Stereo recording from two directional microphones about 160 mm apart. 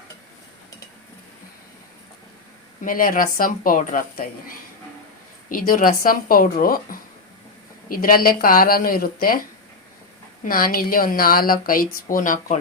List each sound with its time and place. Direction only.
2.8 s a woman's voice: 60° left (ahead or behind)
10.4 s a woman's voice: 65° left (ahead or behind)